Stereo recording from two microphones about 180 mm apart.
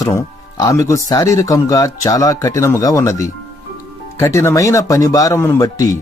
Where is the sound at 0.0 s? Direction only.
15° left (ahead or behind).